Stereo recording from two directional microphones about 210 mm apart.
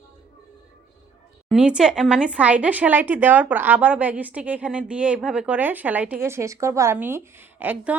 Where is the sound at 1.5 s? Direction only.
5° right (ahead or behind).